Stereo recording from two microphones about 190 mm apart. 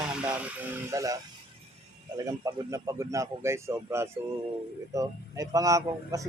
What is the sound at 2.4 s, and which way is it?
A man's voice, 15° right (ahead or behind).